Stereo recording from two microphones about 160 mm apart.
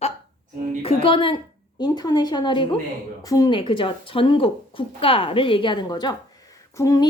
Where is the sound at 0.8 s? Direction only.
35° left (ahead or behind).